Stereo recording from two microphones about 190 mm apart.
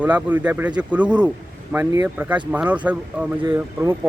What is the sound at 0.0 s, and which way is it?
Speech, 10° right (ahead or behind).